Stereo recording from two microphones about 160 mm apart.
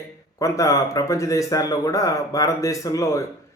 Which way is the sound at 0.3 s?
20° left (ahead or behind).